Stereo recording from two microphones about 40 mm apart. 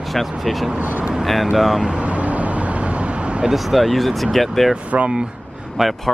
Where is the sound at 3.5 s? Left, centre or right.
Centre.